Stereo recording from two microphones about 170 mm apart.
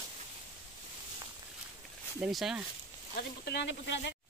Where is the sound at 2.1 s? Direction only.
5° right (ahead or behind).